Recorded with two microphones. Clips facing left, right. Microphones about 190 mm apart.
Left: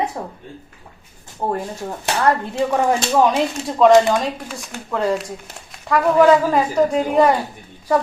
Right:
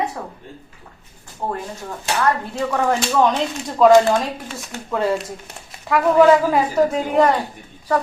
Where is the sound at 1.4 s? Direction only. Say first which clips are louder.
Left 3 dB; 20° left (ahead or behind).